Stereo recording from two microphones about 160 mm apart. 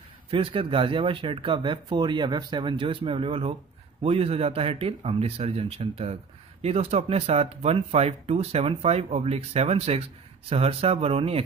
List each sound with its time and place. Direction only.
0.3 s speech: 35° right (ahead or behind)